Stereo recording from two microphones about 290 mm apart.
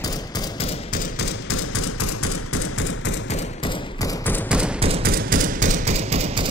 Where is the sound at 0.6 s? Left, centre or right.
Centre.